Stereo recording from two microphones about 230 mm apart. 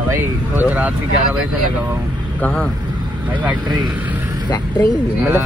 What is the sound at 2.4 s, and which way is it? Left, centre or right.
Speech, centre.